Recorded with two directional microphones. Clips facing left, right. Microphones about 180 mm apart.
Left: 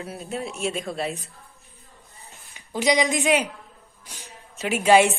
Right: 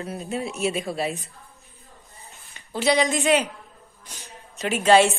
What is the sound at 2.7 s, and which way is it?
Speech, 15° left (ahead or behind).